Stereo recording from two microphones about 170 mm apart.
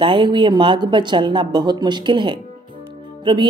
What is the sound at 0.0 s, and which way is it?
A woman's voice, 30° right (ahead or behind).